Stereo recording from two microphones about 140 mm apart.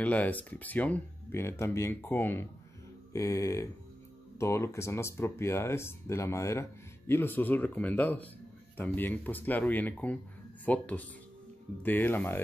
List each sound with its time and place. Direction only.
0.0 s speech: 10° left (ahead or behind)